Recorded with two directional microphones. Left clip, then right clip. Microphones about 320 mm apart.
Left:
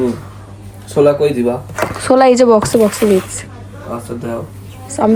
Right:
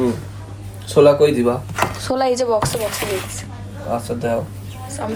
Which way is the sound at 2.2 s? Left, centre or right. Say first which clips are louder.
Left 7 dB; left.